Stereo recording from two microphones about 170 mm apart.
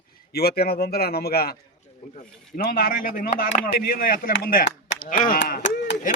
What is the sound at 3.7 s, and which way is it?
Speech, 60° left (ahead or behind).